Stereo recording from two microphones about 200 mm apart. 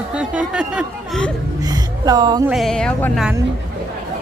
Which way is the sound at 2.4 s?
Centre (ahead or behind).